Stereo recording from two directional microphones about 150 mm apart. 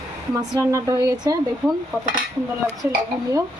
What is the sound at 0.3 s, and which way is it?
Speech, 20° right (ahead or behind).